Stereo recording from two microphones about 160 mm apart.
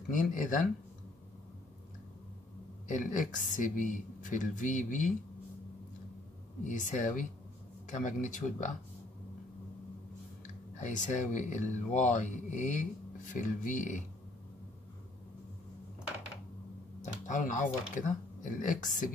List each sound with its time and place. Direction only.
0.1 s speech: 55° left (ahead or behind)
2.9 s speech: 55° left (ahead or behind)
6.7 s speech: 50° left (ahead or behind)
10.4 s speech: 50° left (ahead or behind)
17.0 s speech: 50° left (ahead or behind)